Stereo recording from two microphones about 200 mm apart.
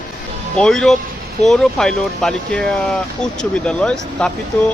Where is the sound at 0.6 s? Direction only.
Centre (ahead or behind).